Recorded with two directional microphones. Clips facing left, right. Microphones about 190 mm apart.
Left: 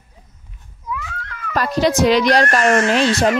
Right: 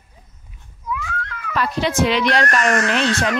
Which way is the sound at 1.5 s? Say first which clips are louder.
Left 4 dB; 40° left (ahead or behind).